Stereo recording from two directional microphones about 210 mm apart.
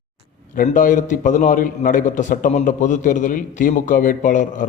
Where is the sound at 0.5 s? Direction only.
40° left (ahead or behind).